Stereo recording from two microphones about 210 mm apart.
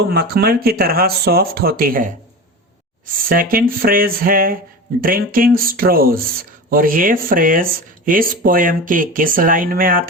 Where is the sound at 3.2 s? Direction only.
45° right (ahead or behind).